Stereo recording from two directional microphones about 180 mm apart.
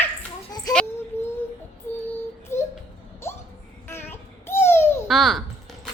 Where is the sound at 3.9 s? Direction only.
10° left (ahead or behind).